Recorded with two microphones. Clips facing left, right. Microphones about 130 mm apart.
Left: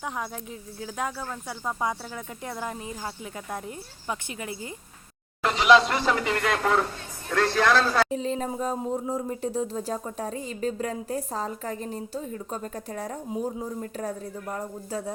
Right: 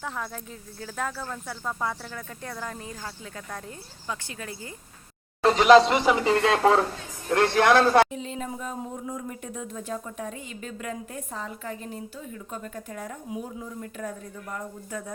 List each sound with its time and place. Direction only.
0.0 s speech: 15° left (ahead or behind)
5.5 s speech: 45° right (ahead or behind)
5.8 s a man's voice: 15° right (ahead or behind)
6.2 s speech: 30° right (ahead or behind)
7.3 s a man's voice: 20° right (ahead or behind)
8.1 s speech: 35° left (ahead or behind)